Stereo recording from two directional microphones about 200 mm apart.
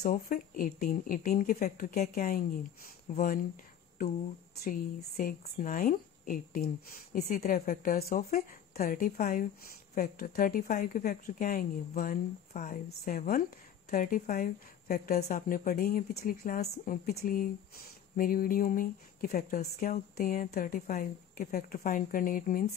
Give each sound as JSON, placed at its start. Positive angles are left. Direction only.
{"t": 0.0, "sound": "a woman's voice", "side_deg": 45}
{"t": 4.6, "sound": "a woman's voice", "side_deg": 45}